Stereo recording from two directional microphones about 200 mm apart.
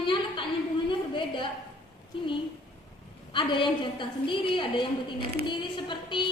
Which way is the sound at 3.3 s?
25° left (ahead or behind).